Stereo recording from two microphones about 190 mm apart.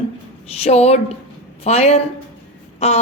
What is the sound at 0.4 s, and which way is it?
A woman's voice, 35° left (ahead or behind).